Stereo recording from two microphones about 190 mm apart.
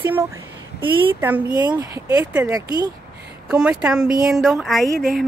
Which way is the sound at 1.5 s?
20° right (ahead or behind).